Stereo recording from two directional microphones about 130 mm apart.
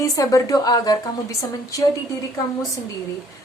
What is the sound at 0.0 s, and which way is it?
A woman's voice, 25° left (ahead or behind).